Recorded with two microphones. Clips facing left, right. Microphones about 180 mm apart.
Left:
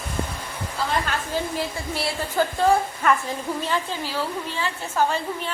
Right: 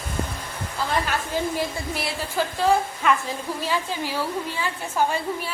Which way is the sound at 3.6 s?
15° right (ahead or behind).